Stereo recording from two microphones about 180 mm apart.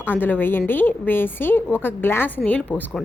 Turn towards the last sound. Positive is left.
turn(degrees=5)  # may be behind; listen again after turning